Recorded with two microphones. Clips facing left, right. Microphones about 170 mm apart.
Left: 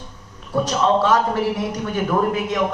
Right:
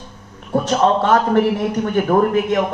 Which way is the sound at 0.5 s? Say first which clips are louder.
Right 2 dB; 50° right (ahead or behind).